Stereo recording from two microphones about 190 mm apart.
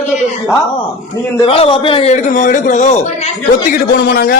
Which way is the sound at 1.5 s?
30° left (ahead or behind).